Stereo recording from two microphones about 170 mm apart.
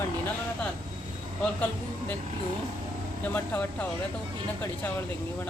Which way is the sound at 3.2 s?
10° left (ahead or behind).